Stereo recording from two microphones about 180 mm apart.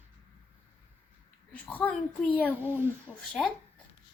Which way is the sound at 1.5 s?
10° left (ahead or behind).